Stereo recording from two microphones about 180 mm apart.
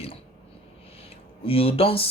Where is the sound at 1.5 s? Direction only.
30° left (ahead or behind).